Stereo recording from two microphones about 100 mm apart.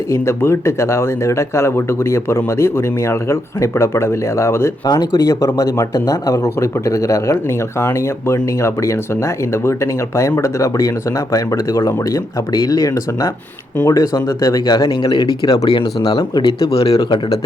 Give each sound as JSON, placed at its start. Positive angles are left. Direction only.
{"t": 0.1, "sound": "speech", "side_deg": 25}
{"t": 14.7, "sound": "speech", "side_deg": 45}
{"t": 15.7, "sound": "speech", "side_deg": 50}
{"t": 16.6, "sound": "speech", "side_deg": 75}